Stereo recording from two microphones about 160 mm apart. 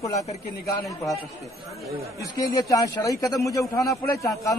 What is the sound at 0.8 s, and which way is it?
Speech, centre (ahead or behind).